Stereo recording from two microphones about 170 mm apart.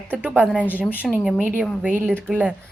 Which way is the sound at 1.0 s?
Centre (ahead or behind).